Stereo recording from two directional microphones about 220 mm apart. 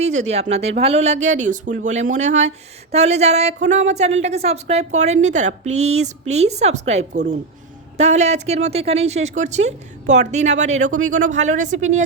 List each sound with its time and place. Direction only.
0.0 s a woman's voice: 30° right (ahead or behind)